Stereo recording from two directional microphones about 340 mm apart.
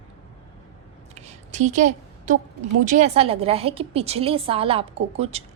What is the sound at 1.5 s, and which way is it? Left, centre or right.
A woman's voice, centre.